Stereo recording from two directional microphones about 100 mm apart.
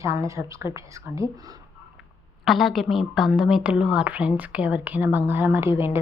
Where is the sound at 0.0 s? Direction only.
30° right (ahead or behind).